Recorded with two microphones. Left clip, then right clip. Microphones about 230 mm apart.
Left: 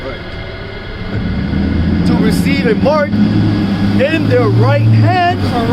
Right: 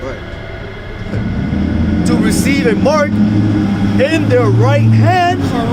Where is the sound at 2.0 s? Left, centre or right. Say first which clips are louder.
Even; right.